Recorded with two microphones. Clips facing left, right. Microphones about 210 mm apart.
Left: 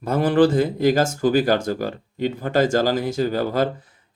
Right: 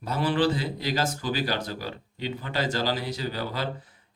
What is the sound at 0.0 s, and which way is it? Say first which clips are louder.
Speech: left 8 dB; 50° left (ahead or behind).